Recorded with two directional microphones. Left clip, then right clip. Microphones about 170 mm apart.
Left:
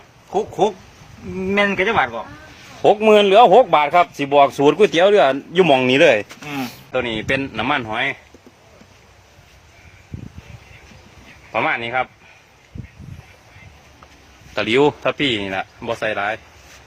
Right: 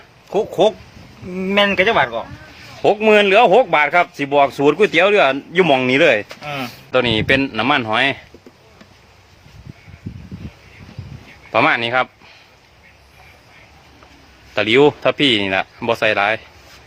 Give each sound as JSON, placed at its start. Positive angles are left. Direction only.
{"t": 0.3, "sound": "speech", "side_deg": -65}
{"t": 1.4, "sound": "speech", "side_deg": -80}
{"t": 2.8, "sound": "speech", "side_deg": 5}
{"t": 6.9, "sound": "speech", "side_deg": -60}
{"t": 7.3, "sound": "speech", "side_deg": -30}
{"t": 7.9, "sound": "speech", "side_deg": -60}
{"t": 11.5, "sound": "speech", "side_deg": -70}
{"t": 14.5, "sound": "a man's voice", "side_deg": -15}
{"t": 15.2, "sound": "speech", "side_deg": -30}